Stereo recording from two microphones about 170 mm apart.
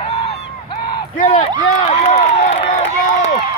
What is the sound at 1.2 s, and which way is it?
Speech, 30° left (ahead or behind).